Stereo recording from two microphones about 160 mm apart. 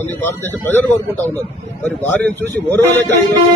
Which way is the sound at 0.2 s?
10° left (ahead or behind).